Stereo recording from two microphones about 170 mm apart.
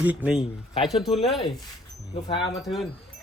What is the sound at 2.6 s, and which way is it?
Speech, centre (ahead or behind).